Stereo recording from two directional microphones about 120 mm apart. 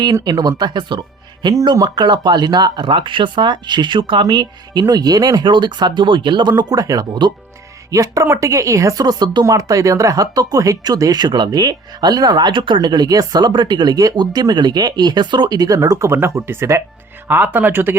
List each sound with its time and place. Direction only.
0.0 s speech: 35° right (ahead or behind)
7.9 s a woman's voice: 25° right (ahead or behind)